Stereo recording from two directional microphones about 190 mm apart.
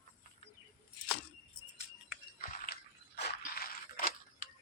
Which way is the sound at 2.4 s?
50° left (ahead or behind).